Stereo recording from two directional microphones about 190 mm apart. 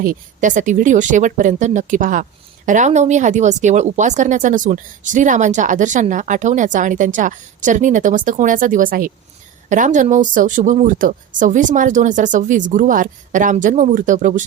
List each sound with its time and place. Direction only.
0.0 s speech: 45° right (ahead or behind)